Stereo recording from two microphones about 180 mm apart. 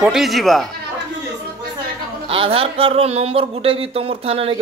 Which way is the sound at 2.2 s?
30° right (ahead or behind).